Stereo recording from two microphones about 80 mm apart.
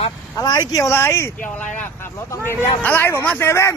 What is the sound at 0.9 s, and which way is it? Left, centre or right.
Speech, left.